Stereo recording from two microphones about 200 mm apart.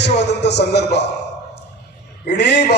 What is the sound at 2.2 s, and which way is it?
Speech, 55° left (ahead or behind).